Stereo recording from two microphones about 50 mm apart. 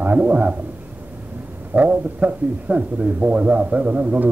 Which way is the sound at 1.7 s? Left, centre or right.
Right.